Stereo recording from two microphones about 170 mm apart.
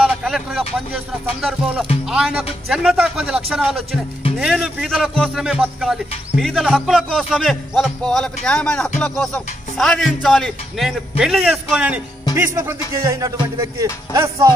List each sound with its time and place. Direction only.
0.0 s speech: centre (ahead or behind)
2.0 s music: 5° right (ahead or behind)
2.7 s speech: 5° right (ahead or behind)
12.6 s speech: 15° right (ahead or behind)